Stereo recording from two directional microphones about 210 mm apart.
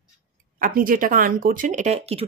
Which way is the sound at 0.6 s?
40° right (ahead or behind).